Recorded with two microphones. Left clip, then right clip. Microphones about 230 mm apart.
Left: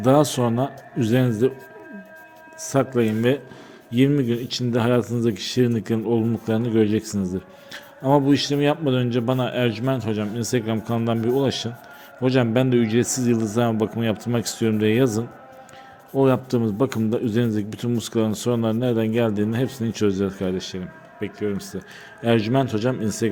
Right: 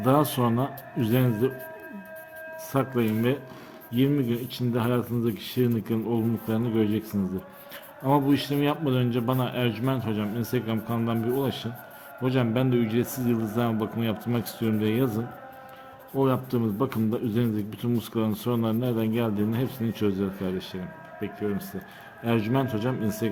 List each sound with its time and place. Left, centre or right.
0.0 s speech: centre
2.6 s speech: centre